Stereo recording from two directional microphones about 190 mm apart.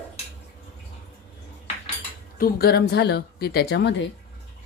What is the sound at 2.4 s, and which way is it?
Speech, 55° left (ahead or behind).